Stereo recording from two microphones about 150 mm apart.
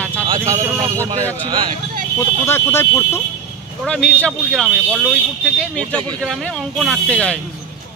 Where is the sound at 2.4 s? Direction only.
15° left (ahead or behind).